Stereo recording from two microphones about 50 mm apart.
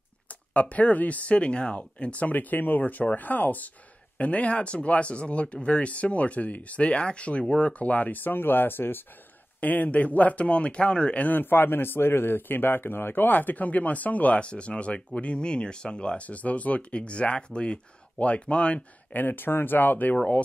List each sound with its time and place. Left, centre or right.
0.5 s a man's voice: left
9.6 s speech: left
11.2 s a man's voice: left
19.1 s speech: left